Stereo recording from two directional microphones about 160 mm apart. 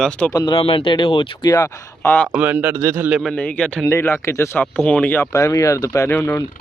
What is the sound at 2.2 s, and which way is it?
Speech, 10° right (ahead or behind).